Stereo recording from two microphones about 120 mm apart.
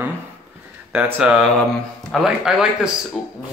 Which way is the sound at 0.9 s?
5° right (ahead or behind).